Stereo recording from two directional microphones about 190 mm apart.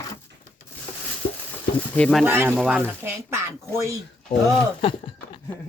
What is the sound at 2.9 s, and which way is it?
Speech, 10° right (ahead or behind).